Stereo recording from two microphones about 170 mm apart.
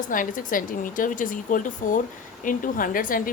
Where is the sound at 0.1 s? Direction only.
50° left (ahead or behind).